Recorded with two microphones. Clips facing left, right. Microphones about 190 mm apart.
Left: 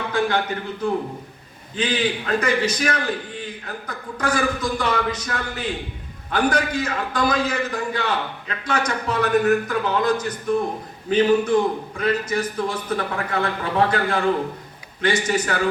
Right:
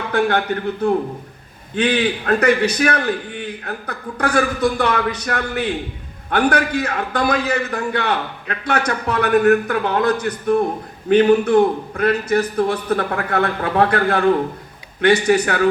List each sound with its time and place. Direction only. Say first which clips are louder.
0.1 s speech: right 5 dB; 60° right (ahead or behind)
1.7 s a man's voice: right 5 dB; 60° right (ahead or behind)